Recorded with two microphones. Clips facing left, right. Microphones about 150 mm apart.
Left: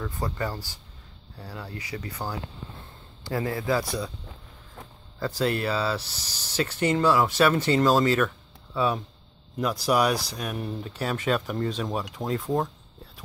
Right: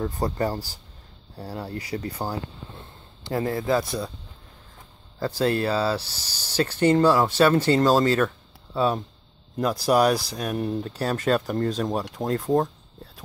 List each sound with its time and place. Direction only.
0.0 s a man's voice: 35° right (ahead or behind)
5.2 s speech: 35° right (ahead or behind)